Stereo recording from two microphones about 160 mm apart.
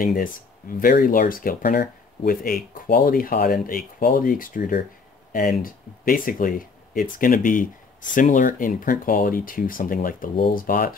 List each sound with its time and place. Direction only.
0.0 s speech: 60° left (ahead or behind)